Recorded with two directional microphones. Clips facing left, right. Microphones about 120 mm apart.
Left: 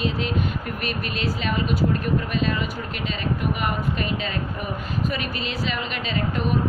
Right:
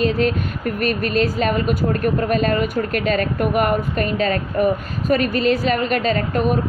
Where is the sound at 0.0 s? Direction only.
45° right (ahead or behind).